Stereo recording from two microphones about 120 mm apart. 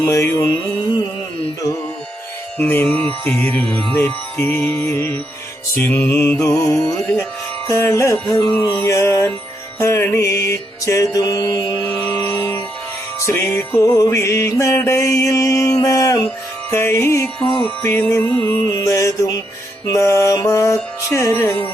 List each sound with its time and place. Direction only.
0.0 s mantra: 25° left (ahead or behind)
2.6 s music: 15° left (ahead or behind)
5.7 s mantra: 15° left (ahead or behind)
6.7 s music: 10° left (ahead or behind)
7.7 s mantra: 25° left (ahead or behind)
9.7 s music: 20° left (ahead or behind)
13.1 s music: 20° left (ahead or behind)
17.4 s music: 5° left (ahead or behind)
17.8 s music: 20° left (ahead or behind)
18.4 s mantra: 25° left (ahead or behind)
19.9 s music: 20° left (ahead or behind)